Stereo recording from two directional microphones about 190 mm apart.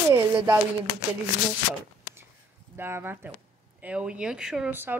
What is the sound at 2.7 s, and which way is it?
Speech, 10° right (ahead or behind).